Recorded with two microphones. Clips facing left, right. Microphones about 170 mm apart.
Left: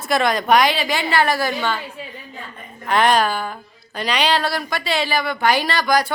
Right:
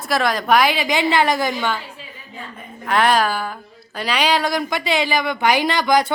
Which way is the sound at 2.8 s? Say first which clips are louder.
Even; centre (ahead or behind).